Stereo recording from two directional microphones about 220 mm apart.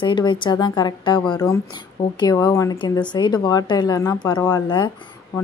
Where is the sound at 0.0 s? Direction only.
20° left (ahead or behind).